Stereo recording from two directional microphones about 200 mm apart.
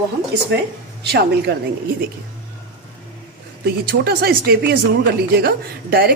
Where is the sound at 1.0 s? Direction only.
55° right (ahead or behind).